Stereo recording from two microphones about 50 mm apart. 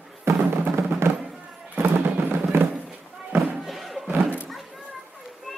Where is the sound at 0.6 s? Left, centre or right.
Right.